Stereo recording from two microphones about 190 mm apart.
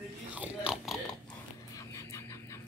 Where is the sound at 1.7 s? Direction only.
15° left (ahead or behind).